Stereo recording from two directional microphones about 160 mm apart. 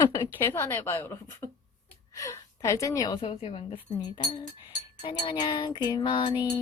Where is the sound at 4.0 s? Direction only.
25° left (ahead or behind).